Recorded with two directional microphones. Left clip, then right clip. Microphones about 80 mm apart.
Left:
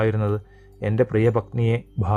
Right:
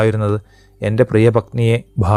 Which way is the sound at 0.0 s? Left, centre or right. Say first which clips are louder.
Right 6 dB; right.